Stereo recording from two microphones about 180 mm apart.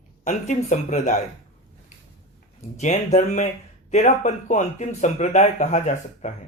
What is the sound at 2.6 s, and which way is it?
Speech, 40° left (ahead or behind).